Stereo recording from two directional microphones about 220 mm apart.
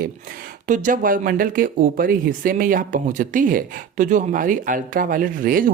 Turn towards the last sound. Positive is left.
turn(degrees=-40)  # may be behind; listen again after turning